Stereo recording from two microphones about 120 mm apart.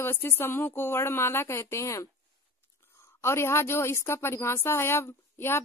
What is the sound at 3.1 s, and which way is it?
Speech, 20° left (ahead or behind).